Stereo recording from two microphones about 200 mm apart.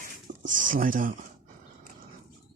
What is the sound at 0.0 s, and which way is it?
Speech, 40° right (ahead or behind).